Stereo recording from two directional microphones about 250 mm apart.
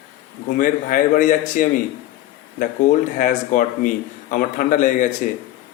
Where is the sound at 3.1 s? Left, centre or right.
Left.